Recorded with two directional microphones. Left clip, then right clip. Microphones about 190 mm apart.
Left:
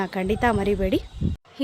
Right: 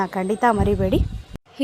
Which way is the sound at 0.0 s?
10° left (ahead or behind).